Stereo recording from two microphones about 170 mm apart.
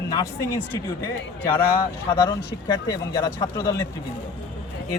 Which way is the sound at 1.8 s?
25° left (ahead or behind).